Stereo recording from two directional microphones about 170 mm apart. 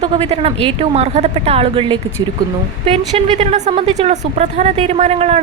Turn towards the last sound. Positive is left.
turn(degrees=-40)  # may be behind; listen again after turning